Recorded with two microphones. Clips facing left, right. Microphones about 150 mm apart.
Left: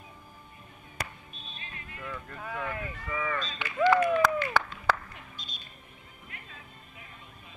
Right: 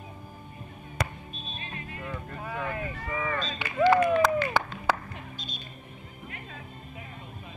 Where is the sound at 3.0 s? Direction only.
40° right (ahead or behind).